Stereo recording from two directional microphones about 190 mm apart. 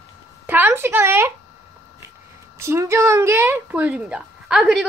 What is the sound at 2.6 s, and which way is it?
A woman's voice, 15° right (ahead or behind).